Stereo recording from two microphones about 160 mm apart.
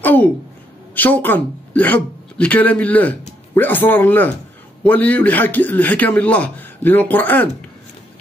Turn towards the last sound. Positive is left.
turn(degrees=10)  # may be behind; listen again after turning